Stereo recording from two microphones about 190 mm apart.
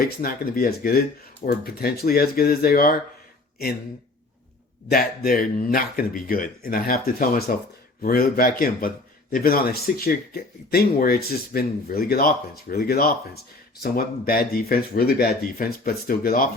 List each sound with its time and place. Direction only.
0.0 s speech: 50° left (ahead or behind)
4.9 s speech: 50° left (ahead or behind)